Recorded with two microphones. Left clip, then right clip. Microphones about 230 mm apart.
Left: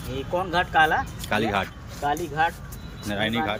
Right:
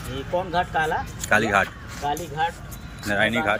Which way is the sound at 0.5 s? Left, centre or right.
Left.